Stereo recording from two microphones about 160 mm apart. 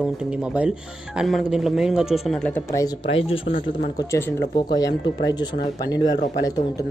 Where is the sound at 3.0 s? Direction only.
35° left (ahead or behind).